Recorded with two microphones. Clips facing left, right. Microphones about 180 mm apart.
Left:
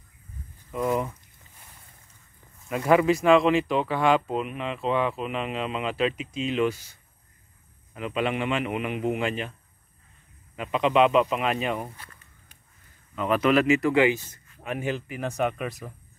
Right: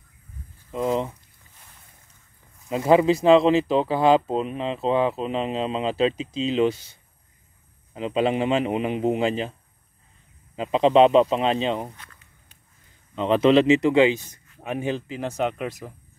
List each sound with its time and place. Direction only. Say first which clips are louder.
0.7 s speech: right 2 dB; 20° right (ahead or behind)
2.7 s speech: right 3 dB; 25° right (ahead or behind)
7.9 s speech: right 5 dB; 30° right (ahead or behind)
13.1 s speech: right 5 dB; 25° right (ahead or behind)